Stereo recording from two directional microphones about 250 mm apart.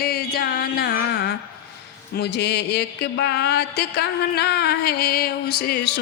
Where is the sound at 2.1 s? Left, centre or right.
Left.